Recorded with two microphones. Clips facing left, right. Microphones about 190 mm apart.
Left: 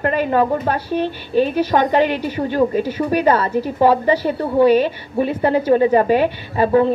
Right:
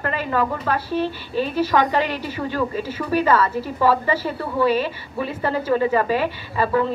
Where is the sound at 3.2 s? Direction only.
40° left (ahead or behind).